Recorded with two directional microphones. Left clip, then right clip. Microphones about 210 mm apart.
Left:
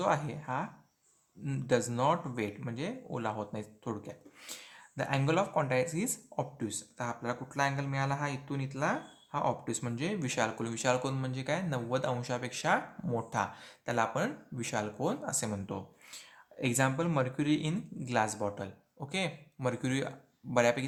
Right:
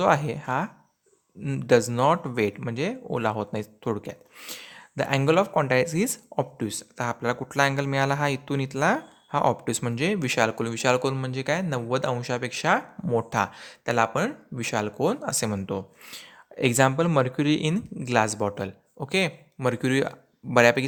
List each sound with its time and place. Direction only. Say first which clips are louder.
0.0 s speech: right 9 dB; 40° right (ahead or behind)